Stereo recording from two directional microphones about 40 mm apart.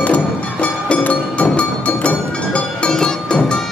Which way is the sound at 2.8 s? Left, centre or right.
Centre.